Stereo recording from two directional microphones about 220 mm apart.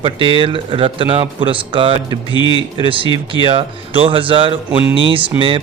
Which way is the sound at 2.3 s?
20° left (ahead or behind).